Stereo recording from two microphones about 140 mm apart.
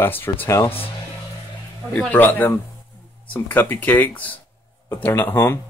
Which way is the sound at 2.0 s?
10° left (ahead or behind).